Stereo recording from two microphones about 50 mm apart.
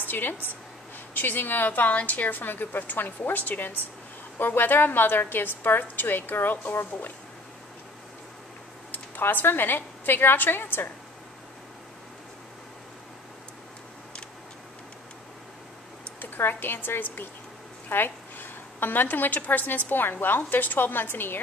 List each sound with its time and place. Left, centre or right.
0.0 s a woman's voice: left
8.9 s a woman's voice: left
16.2 s a woman's voice: left